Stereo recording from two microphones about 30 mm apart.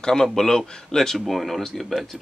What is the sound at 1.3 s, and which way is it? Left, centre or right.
Speech, centre.